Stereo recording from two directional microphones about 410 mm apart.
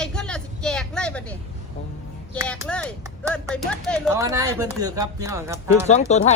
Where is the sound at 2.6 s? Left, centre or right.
Centre.